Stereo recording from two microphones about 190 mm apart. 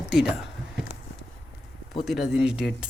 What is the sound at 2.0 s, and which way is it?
Speech, centre (ahead or behind).